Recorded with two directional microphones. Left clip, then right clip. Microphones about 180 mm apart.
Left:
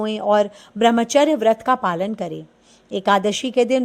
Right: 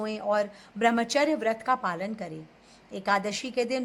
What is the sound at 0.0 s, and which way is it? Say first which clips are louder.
Speech: left 10 dB; 45° left (ahead or behind).